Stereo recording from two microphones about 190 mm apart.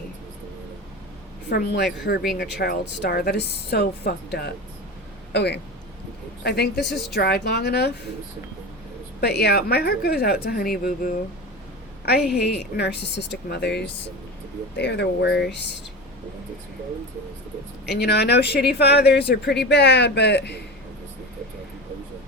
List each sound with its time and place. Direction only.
1.5 s speech: 60° left (ahead or behind)
6.7 s a woman's voice: centre (ahead or behind)
7.1 s speech: 60° left (ahead or behind)
9.2 s speech: 60° left (ahead or behind)
12.0 s speech: 60° left (ahead or behind)
17.8 s speech: 60° left (ahead or behind)